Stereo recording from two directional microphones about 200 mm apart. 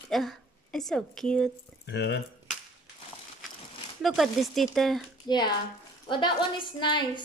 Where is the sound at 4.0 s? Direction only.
Centre (ahead or behind).